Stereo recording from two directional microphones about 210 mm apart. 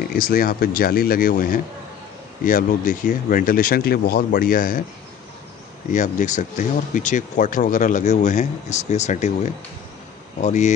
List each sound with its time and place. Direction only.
0.1 s speech: 45° left (ahead or behind)
5.9 s speech: 35° left (ahead or behind)
10.4 s speech: 35° left (ahead or behind)